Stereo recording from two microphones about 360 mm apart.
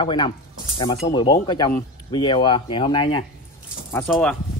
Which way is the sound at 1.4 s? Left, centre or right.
Centre.